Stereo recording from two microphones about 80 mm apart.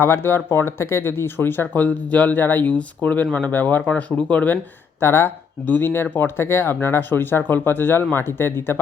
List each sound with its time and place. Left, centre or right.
0.0 s speech: left